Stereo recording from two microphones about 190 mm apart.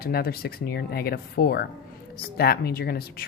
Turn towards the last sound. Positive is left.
turn(degrees=55)  # may be behind; listen again after turning